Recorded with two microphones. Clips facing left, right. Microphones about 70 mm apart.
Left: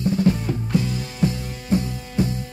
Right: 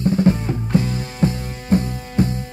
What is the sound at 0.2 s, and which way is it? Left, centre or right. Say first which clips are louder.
Music: right 3 dB; right.